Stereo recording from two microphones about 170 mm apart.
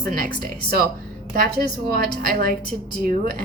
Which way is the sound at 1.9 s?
55° right (ahead or behind).